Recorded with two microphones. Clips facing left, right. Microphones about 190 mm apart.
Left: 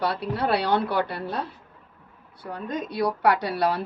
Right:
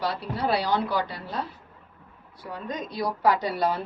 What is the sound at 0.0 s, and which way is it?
A woman's voice, 60° left (ahead or behind).